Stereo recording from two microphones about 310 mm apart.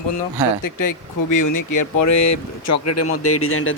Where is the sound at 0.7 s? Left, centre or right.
Left.